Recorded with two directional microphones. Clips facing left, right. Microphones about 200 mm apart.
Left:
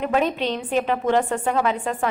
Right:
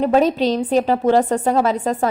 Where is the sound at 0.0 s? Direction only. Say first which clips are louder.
Right 6 dB; 35° right (ahead or behind).